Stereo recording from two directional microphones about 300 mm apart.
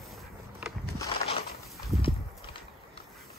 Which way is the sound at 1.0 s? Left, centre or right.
Centre.